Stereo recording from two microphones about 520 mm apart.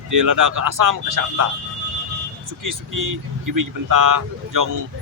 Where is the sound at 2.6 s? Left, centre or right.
Right.